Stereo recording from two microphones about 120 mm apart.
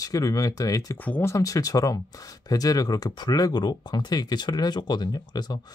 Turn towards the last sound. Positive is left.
turn(degrees=35)  # may be behind; listen again after turning